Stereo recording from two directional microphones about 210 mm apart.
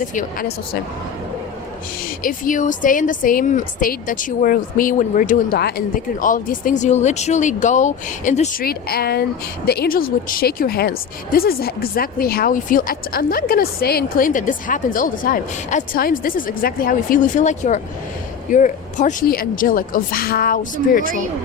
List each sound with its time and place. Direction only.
0.1 s a woman's voice: 40° left (ahead or behind)
2.2 s a woman's voice: 40° left (ahead or behind)